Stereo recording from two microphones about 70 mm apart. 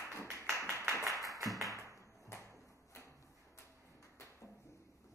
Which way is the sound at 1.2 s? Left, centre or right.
Right.